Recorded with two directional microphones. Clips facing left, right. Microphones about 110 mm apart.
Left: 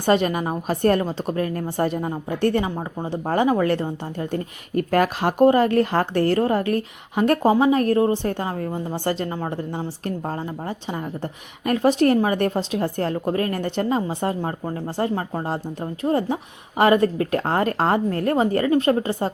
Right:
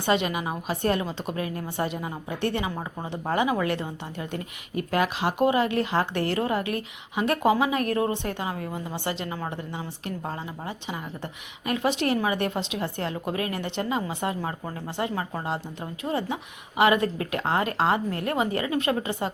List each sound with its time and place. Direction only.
0.0 s a woman's voice: 40° left (ahead or behind)